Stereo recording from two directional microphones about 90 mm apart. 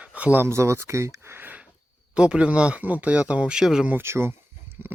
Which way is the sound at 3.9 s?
25° right (ahead or behind).